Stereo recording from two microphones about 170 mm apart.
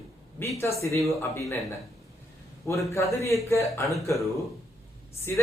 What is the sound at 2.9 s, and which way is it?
Speech, 15° left (ahead or behind).